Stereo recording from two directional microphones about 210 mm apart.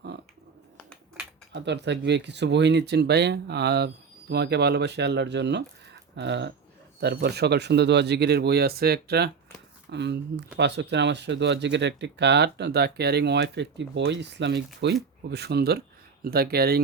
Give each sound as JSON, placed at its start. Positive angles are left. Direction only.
{"t": 1.5, "sound": "speech", "side_deg": -55}